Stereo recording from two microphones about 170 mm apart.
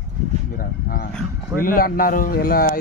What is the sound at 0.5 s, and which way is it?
Speech, 60° left (ahead or behind).